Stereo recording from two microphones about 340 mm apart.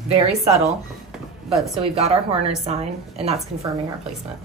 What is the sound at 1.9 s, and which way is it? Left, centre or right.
Speech, centre.